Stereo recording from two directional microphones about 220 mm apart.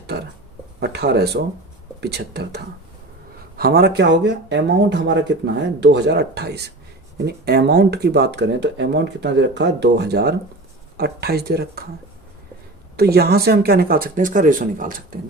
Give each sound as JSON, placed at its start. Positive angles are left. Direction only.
{"t": 0.8, "sound": "speech", "side_deg": -50}
{"t": 3.6, "sound": "speech", "side_deg": -45}
{"t": 13.0, "sound": "speech", "side_deg": -45}